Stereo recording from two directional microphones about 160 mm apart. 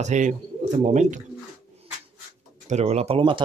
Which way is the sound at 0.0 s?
50° right (ahead or behind).